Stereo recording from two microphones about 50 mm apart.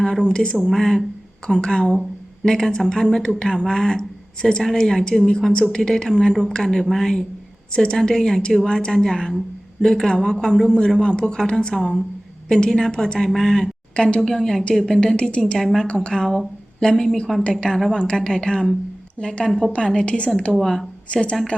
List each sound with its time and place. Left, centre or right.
0.0 s speech: centre
7.7 s a woman's voice: centre
13.9 s a woman's voice: centre
14.3 s a woman's voice: centre
15.0 s a woman's voice: left
15.5 s a woman's voice: centre
17.9 s a woman's voice: centre
20.6 s speech: centre
21.1 s a woman's voice: left